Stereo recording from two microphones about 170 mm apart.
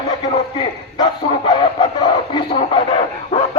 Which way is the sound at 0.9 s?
25° left (ahead or behind).